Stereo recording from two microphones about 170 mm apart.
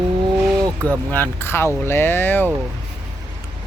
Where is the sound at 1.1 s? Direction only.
10° left (ahead or behind).